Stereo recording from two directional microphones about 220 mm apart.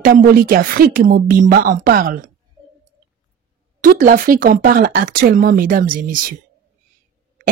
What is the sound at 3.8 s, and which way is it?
Speech, 40° right (ahead or behind).